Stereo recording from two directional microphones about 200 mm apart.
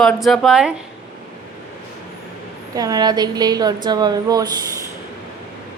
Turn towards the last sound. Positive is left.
turn(degrees=-20)  # may be behind; listen again after turning